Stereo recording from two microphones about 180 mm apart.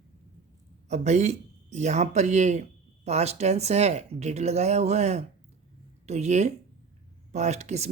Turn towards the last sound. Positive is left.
turn(degrees=-40)  # may be behind; listen again after turning